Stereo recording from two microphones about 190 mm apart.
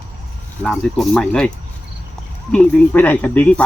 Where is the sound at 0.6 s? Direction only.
5° left (ahead or behind).